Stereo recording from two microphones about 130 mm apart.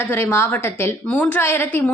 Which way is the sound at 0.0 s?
15° left (ahead or behind).